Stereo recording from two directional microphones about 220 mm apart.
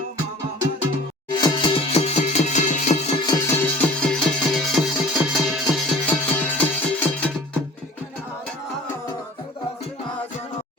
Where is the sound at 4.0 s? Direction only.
Centre (ahead or behind).